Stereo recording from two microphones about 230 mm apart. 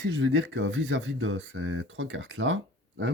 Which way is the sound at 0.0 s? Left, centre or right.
Right.